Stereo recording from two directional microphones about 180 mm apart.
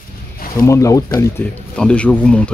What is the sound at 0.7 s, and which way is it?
Speech, 15° left (ahead or behind).